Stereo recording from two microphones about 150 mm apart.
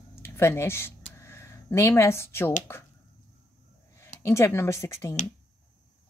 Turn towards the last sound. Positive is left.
turn(degrees=20)  # may be behind; listen again after turning